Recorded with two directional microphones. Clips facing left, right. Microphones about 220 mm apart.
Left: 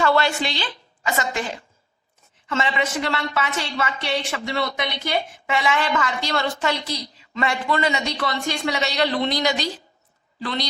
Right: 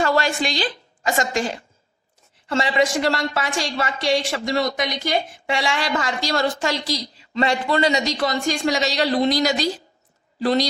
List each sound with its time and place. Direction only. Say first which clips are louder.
0.0 s a sound: even; 40° right (ahead or behind)
0.4 s a woman's voice: right 4 dB; 40° right (ahead or behind)
2.5 s a woman's voice: right 4 dB; 35° right (ahead or behind)